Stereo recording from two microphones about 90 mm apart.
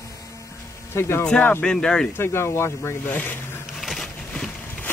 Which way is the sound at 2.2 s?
30° left (ahead or behind).